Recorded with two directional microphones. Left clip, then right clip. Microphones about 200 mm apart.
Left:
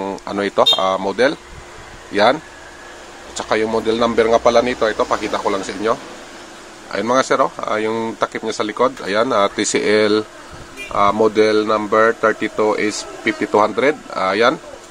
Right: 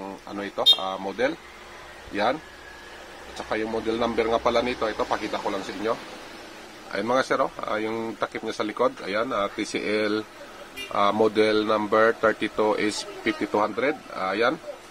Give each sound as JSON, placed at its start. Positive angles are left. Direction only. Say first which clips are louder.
{"t": 0.0, "sound": "speech", "louder": "left 12 dB", "side_deg": 25}
{"t": 3.3, "sound": "speech", "louder": "left 10 dB", "side_deg": 15}
{"t": 10.9, "sound": "speech", "louder": "left 7 dB", "side_deg": 0}